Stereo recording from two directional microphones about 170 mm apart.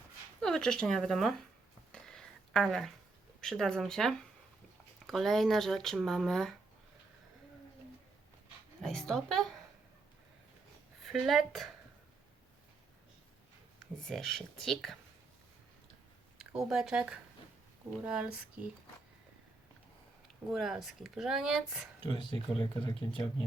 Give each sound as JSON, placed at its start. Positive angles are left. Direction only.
{"t": 0.3, "sound": "speech", "side_deg": 5}
{"t": 1.9, "sound": "a sound", "side_deg": 5}
{"t": 3.4, "sound": "speech", "side_deg": 5}
{"t": 8.8, "sound": "speech", "side_deg": 5}
{"t": 11.0, "sound": "a woman's voice", "side_deg": 0}
{"t": 14.0, "sound": "speech", "side_deg": 0}
{"t": 16.4, "sound": "speech", "side_deg": 0}
{"t": 20.5, "sound": "speech", "side_deg": 0}
{"t": 22.0, "sound": "speech", "side_deg": 30}